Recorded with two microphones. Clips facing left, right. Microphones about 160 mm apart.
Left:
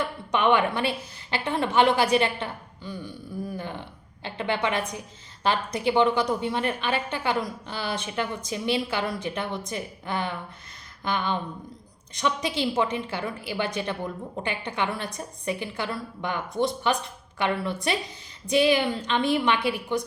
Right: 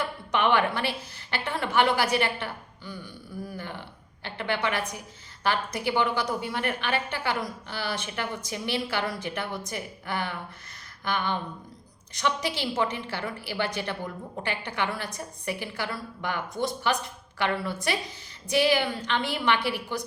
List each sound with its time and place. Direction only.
0.3 s a woman's voice: 20° left (ahead or behind)